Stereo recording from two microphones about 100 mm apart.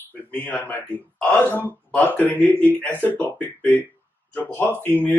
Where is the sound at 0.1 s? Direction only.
15° left (ahead or behind).